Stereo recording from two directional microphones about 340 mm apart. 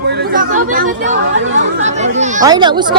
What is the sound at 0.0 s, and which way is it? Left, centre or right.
Chatter, right.